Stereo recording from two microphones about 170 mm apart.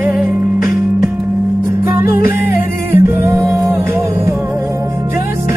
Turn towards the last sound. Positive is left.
turn(degrees=-15)  # may be behind; listen again after turning